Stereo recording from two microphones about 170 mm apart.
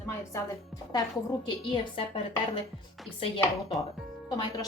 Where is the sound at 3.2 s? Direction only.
35° left (ahead or behind).